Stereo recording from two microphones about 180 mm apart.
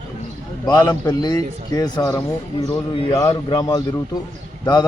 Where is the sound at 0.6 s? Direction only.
25° left (ahead or behind).